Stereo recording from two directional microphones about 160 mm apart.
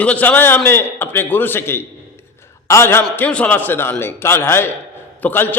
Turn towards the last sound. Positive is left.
turn(degrees=10)  # may be behind; listen again after turning